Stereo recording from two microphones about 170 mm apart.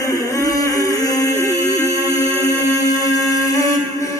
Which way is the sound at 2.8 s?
20° left (ahead or behind).